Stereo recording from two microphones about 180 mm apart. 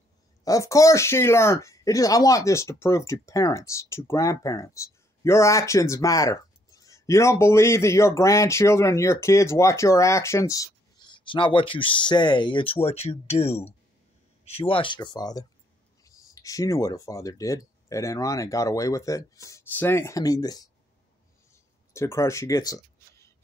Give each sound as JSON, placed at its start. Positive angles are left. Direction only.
{"t": 0.4, "sound": "speech", "side_deg": 20}
{"t": 21.9, "sound": "speech", "side_deg": 15}